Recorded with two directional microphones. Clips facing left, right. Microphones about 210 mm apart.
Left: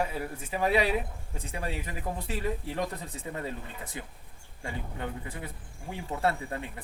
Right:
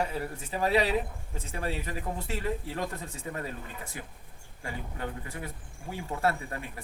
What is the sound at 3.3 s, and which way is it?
Speech, 20° left (ahead or behind).